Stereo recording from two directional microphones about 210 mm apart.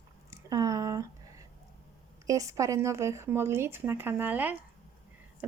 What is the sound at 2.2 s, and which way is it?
Speech, 15° right (ahead or behind).